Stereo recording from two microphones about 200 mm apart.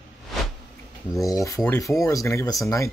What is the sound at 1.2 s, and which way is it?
Speech, 15° left (ahead or behind).